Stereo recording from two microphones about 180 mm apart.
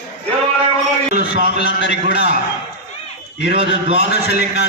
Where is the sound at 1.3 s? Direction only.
50° right (ahead or behind).